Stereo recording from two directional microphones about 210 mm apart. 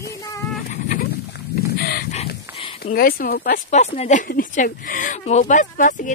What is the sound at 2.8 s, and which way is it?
Speech, 45° left (ahead or behind).